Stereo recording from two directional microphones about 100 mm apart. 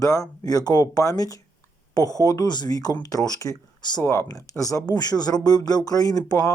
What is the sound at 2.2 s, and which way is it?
Speech, 40° left (ahead or behind).